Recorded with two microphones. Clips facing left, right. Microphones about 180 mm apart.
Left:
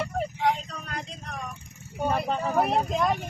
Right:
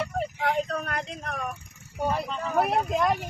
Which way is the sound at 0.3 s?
60° right (ahead or behind).